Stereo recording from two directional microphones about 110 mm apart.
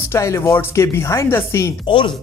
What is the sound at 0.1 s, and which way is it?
A man's voice, 25° left (ahead or behind).